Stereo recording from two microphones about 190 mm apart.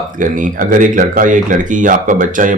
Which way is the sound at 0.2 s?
45° right (ahead or behind).